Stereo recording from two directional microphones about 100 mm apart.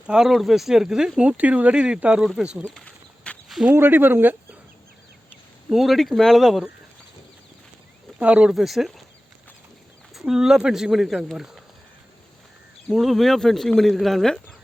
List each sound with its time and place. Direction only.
0.1 s speech: 5° right (ahead or behind)
2.6 s a sound: 10° left (ahead or behind)
3.7 s speech: 20° right (ahead or behind)
5.6 s speech: 5° right (ahead or behind)
8.2 s speech: 10° right (ahead or behind)
10.2 s speech: 5° right (ahead or behind)
12.9 s speech: centre (ahead or behind)